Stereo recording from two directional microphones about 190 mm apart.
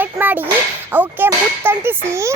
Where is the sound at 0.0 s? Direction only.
10° right (ahead or behind).